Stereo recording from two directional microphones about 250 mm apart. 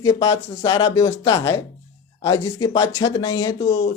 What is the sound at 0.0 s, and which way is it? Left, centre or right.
A man's voice, centre.